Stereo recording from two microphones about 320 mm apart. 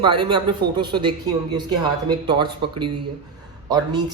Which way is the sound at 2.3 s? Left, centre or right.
Centre.